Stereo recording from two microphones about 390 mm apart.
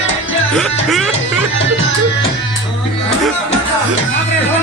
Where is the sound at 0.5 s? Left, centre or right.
Centre.